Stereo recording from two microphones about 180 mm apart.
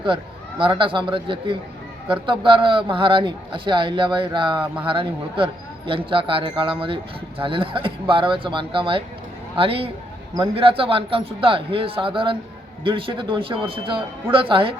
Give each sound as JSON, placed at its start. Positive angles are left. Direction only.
{"t": 0.6, "sound": "speech", "side_deg": -30}